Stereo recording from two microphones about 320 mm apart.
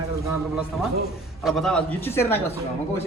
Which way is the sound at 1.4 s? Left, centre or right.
Centre.